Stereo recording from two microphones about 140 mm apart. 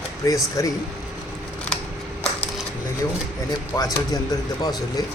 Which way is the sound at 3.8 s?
25° left (ahead or behind).